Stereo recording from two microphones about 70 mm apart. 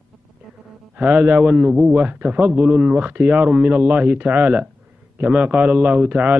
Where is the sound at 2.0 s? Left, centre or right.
Right.